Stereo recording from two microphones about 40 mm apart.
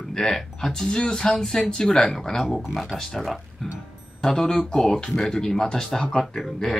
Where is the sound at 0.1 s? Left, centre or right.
Centre.